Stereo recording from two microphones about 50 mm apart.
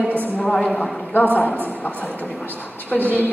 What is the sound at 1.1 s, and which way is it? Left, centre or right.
A woman's voice, left.